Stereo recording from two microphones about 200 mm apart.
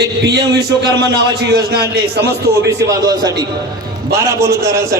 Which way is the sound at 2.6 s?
20° right (ahead or behind).